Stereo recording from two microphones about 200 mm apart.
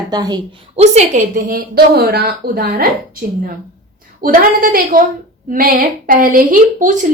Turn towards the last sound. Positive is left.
turn(degrees=-40)  # may be behind; listen again after turning